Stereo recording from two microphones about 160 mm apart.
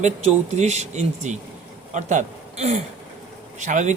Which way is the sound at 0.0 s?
45° right (ahead or behind).